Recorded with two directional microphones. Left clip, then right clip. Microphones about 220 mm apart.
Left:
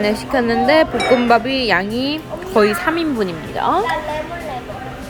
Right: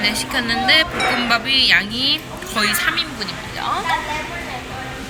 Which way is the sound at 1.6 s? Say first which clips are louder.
Right 2 dB; 25° left (ahead or behind).